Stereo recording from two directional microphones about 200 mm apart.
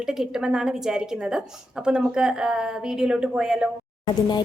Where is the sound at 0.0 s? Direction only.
5° right (ahead or behind).